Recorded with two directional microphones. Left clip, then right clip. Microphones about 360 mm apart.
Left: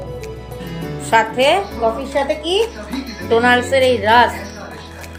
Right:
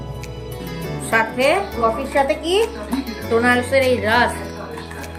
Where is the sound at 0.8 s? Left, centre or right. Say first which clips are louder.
Left 4 dB; centre.